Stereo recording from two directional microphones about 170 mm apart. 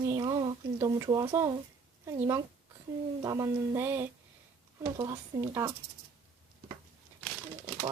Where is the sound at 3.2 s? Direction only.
20° right (ahead or behind).